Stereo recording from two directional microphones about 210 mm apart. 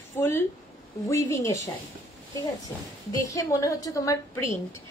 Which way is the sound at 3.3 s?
15° left (ahead or behind).